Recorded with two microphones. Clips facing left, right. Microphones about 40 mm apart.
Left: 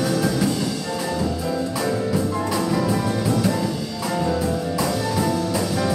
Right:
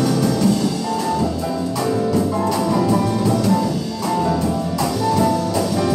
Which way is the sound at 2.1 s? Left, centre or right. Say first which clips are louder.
Right 4 dB; centre.